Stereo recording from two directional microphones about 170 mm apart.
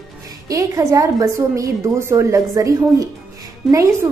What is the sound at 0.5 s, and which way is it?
A woman's voice, 20° right (ahead or behind).